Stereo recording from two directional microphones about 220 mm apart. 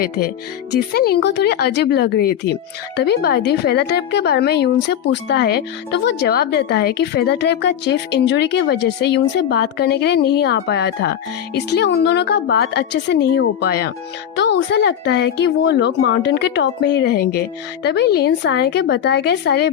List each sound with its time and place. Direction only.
0.7 s speech: 45° left (ahead or behind)